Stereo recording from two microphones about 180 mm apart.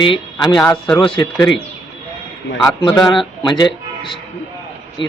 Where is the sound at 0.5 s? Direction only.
5° left (ahead or behind).